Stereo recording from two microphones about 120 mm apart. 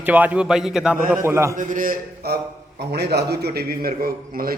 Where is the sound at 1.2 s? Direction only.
20° right (ahead or behind).